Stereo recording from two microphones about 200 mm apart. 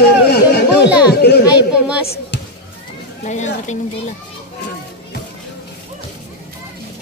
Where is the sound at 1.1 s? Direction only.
55° left (ahead or behind).